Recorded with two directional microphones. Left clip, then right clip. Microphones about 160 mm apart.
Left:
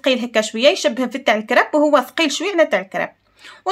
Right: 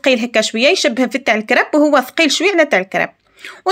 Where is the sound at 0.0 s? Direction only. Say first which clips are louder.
Right 4 dB; 25° right (ahead or behind).